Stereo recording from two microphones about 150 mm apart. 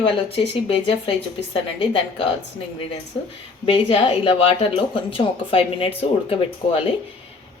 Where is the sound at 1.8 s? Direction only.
35° left (ahead or behind).